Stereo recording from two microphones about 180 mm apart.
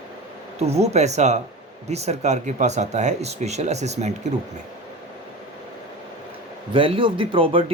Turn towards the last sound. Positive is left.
turn(degrees=-30)  # may be behind; listen again after turning